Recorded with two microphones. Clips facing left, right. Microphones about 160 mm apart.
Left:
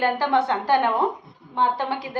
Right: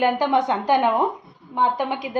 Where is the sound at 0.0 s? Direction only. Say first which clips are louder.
Right 2 dB; 15° right (ahead or behind).